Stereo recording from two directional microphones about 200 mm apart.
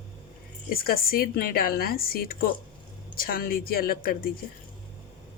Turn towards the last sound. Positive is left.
turn(degrees=45)  # may be behind; listen again after turning